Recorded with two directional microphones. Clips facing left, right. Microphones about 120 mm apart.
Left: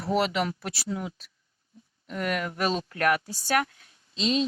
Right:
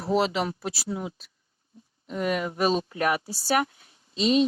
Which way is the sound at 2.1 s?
20° right (ahead or behind).